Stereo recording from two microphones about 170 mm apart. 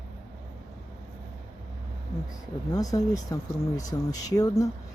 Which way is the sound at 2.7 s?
20° left (ahead or behind).